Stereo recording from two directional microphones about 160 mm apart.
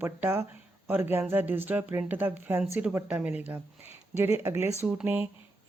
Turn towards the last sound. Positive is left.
turn(degrees=-10)  # may be behind; listen again after turning